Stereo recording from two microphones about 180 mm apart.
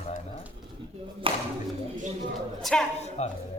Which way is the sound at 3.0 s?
40° left (ahead or behind).